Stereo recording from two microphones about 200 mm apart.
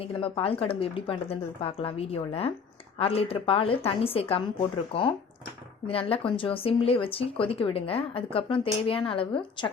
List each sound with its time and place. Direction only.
0.0 s speech: 25° left (ahead or behind)
5.9 s speech: 25° left (ahead or behind)